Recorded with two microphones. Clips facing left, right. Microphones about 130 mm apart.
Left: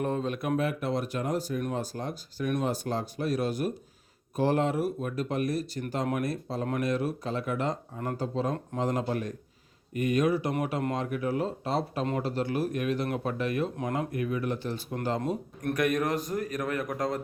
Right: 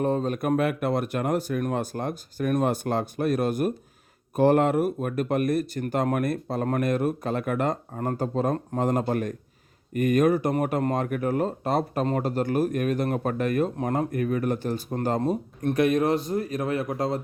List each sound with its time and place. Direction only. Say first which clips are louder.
0.0 s speech: right 5 dB; 40° right (ahead or behind)
15.6 s a man's voice: right 5 dB; 30° right (ahead or behind)